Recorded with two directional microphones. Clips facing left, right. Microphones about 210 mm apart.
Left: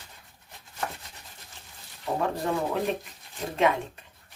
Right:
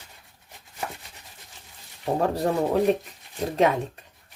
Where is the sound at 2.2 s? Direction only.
40° right (ahead or behind).